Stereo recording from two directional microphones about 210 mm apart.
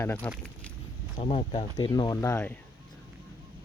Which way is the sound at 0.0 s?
10° left (ahead or behind).